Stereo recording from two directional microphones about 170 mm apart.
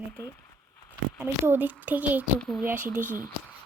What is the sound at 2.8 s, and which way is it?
Speech, 50° right (ahead or behind).